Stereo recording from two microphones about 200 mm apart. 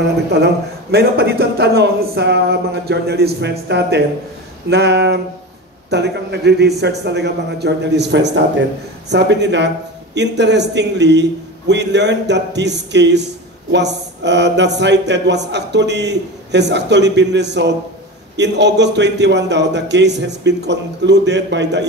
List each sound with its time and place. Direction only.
0.9 s a man's voice: 55° right (ahead or behind)